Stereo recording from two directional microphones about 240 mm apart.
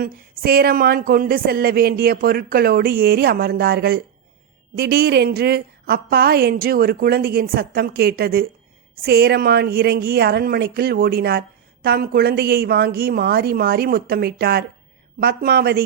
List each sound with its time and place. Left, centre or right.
0.0 s speech: right